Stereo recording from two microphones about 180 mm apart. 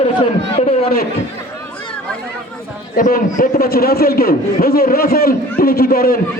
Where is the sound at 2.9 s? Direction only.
50° left (ahead or behind).